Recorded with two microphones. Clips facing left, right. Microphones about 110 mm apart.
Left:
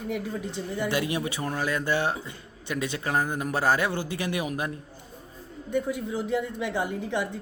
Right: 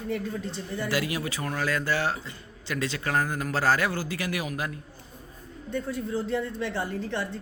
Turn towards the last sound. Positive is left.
turn(degrees=15)  # may be behind; listen again after turning